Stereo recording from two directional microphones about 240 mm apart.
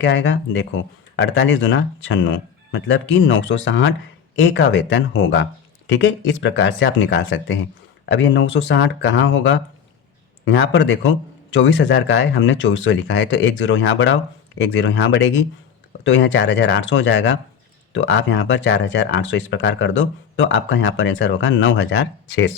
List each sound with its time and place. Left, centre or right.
0.0 s speech: left
10.4 s speech: left